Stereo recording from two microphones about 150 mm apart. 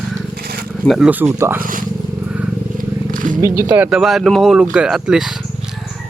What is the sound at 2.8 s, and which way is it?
Wild animals, 60° right (ahead or behind).